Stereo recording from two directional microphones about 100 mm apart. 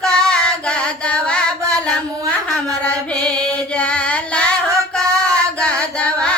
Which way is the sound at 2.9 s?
5° left (ahead or behind).